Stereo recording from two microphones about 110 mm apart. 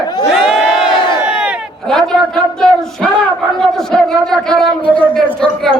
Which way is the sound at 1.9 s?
5° left (ahead or behind).